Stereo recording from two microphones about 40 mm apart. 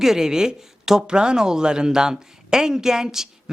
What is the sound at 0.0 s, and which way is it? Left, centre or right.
Speech, centre.